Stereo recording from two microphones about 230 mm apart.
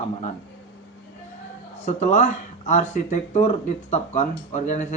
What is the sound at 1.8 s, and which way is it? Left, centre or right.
Speech, left.